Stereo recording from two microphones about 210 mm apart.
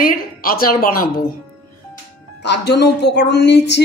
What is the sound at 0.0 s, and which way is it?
A woman's voice, 45° left (ahead or behind).